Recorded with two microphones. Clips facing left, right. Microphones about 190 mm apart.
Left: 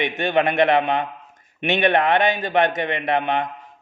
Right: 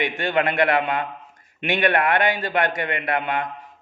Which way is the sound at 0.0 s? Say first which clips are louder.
Left 2 dB; 20° left (ahead or behind).